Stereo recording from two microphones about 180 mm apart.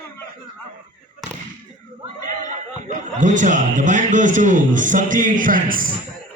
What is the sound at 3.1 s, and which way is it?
A man's voice, 45° right (ahead or behind).